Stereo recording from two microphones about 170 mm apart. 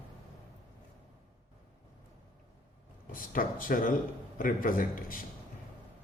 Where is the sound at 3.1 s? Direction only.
55° left (ahead or behind).